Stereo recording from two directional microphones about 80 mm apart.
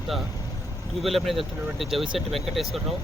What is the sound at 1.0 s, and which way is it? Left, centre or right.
Speech, centre.